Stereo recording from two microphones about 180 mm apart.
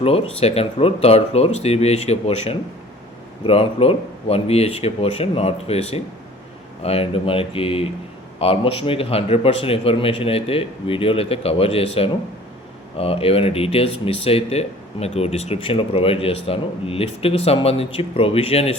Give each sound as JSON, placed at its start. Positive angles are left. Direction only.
{"t": 0.0, "sound": "speech", "side_deg": 30}